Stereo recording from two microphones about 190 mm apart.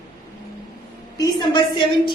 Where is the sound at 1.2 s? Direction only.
20° left (ahead or behind).